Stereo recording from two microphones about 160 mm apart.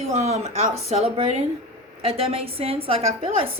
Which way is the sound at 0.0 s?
40° right (ahead or behind).